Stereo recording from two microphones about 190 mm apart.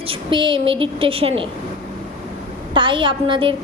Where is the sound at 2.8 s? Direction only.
25° right (ahead or behind).